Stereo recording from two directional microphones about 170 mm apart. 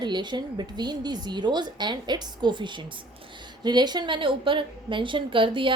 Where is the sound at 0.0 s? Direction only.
25° right (ahead or behind).